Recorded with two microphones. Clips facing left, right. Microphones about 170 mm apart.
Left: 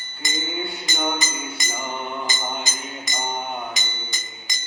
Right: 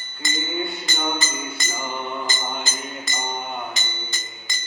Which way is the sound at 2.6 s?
15° left (ahead or behind).